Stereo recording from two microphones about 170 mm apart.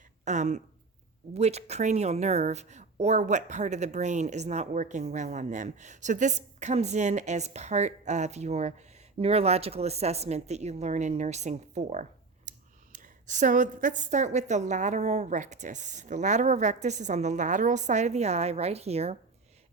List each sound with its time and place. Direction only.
0.3 s speech: 45° right (ahead or behind)